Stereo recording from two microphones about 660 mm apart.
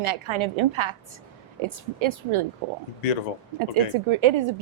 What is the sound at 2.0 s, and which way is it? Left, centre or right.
Speech, right.